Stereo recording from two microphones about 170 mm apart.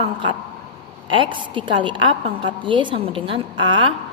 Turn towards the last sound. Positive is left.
turn(degrees=-30)  # may be behind; listen again after turning